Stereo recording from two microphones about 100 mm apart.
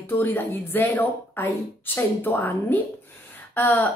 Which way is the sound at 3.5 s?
20° left (ahead or behind).